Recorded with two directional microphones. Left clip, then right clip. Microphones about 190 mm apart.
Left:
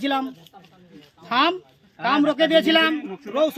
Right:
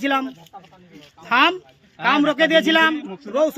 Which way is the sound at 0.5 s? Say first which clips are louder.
Right 7 dB; 30° right (ahead or behind).